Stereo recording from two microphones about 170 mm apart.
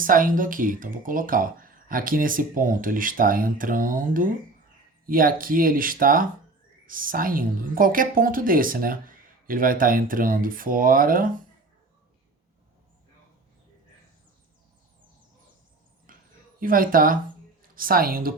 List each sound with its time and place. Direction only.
0.0 s a woman's voice: 55° right (ahead or behind)
16.1 s a sound: 55° right (ahead or behind)
16.6 s a woman's voice: 55° right (ahead or behind)